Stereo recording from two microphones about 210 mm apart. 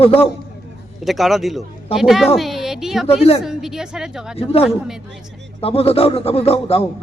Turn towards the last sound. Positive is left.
turn(degrees=30)  # may be behind; listen again after turning